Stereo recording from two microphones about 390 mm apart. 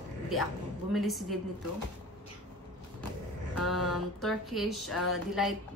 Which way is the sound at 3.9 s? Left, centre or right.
Centre.